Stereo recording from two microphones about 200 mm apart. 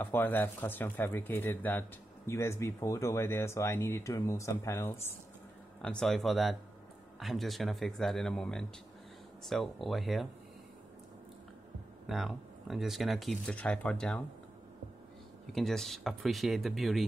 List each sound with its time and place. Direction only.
0.0 s speech: 10° left (ahead or behind)
12.1 s speech: centre (ahead or behind)
15.5 s speech: centre (ahead or behind)